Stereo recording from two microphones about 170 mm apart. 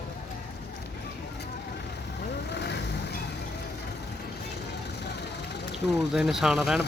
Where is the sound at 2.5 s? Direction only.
90° left.